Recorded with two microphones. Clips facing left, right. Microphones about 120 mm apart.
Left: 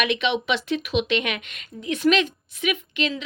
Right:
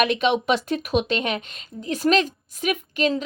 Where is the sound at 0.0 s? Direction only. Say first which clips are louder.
Right 3 dB; 40° right (ahead or behind).